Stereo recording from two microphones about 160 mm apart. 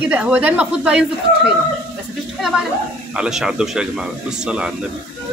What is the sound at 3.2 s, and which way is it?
Speech, 5° right (ahead or behind).